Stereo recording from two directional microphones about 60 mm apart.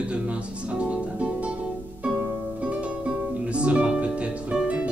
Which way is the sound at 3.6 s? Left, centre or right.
Centre.